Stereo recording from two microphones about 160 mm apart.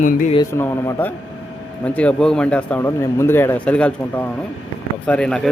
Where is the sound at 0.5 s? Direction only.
15° left (ahead or behind).